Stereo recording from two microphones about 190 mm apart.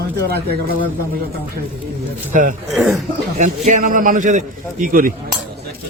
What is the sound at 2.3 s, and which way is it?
Speech, 45° right (ahead or behind).